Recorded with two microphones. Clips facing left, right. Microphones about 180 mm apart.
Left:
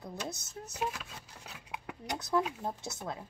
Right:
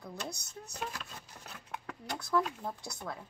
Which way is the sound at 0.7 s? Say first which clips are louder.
Left 4 dB; 5° left (ahead or behind).